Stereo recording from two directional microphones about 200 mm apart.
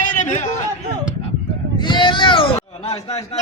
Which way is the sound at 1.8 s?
25° left (ahead or behind).